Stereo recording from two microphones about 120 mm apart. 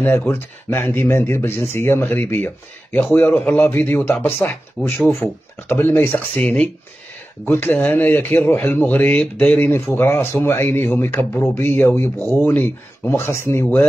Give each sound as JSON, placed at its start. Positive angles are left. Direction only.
{"t": 0.0, "sound": "a man's voice", "side_deg": 10}